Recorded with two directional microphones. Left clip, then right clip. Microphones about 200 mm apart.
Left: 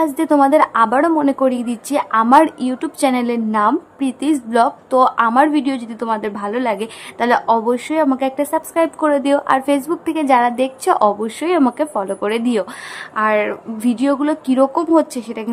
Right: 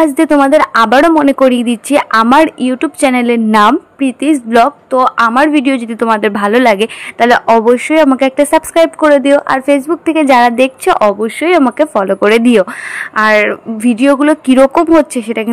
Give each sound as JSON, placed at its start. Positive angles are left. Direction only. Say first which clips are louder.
{"t": 0.0, "sound": "a woman's voice", "louder": "right 5 dB", "side_deg": -25}